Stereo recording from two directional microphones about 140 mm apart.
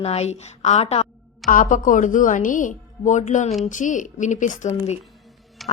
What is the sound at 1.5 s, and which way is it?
A woman's voice, 70° left (ahead or behind).